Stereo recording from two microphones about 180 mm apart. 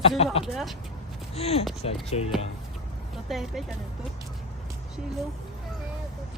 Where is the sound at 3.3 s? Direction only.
Centre (ahead or behind).